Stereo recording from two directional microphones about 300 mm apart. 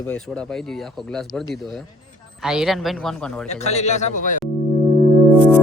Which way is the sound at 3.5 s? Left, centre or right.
Left.